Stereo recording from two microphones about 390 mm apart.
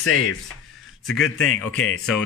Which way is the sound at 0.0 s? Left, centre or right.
Left.